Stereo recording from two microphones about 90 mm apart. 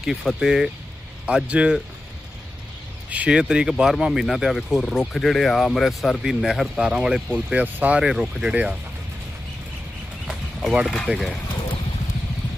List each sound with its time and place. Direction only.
0.0 s speech: 5° right (ahead or behind)
3.1 s speech: 15° right (ahead or behind)
10.2 s a sound: 5° right (ahead or behind)
10.8 s speech: 10° left (ahead or behind)